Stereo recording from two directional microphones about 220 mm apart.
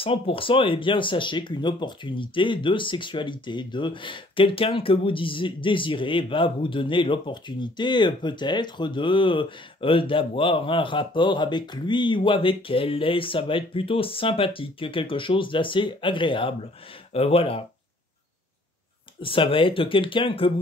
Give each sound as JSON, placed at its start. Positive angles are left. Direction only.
{"t": 0.0, "sound": "speech", "side_deg": 25}
{"t": 19.2, "sound": "speech", "side_deg": 25}